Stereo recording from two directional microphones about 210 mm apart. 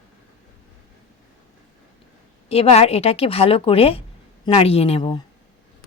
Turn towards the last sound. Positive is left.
turn(degrees=25)  # may be behind; listen again after turning